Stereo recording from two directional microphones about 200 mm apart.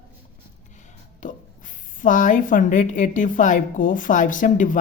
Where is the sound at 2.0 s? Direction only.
40° left (ahead or behind).